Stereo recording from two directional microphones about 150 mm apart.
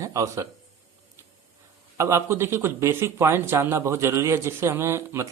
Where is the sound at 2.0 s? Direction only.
20° right (ahead or behind).